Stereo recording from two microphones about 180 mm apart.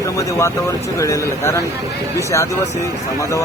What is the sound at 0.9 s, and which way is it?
Speech, 15° left (ahead or behind).